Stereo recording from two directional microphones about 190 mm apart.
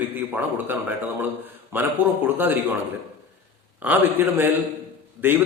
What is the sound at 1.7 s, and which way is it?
Speech, 10° right (ahead or behind).